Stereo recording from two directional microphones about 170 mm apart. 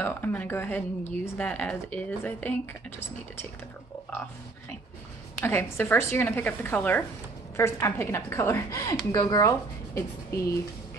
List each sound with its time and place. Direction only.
0.0 s speech: 10° left (ahead or behind)
5.4 s speech: 15° left (ahead or behind)